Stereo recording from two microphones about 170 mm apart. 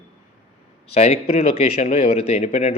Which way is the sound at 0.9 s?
35° left (ahead or behind).